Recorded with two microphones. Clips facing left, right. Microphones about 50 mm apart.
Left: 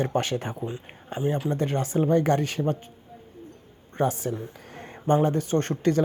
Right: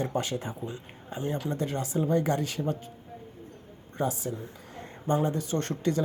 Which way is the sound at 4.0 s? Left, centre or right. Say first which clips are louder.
Left 5 dB; left.